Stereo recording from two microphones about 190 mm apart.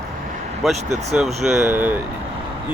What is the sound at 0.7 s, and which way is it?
Speech, 35° right (ahead or behind).